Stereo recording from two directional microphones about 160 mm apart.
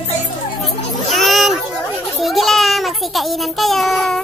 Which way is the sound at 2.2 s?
Centre (ahead or behind).